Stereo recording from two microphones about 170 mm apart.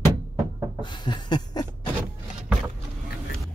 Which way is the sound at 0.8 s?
25° left (ahead or behind).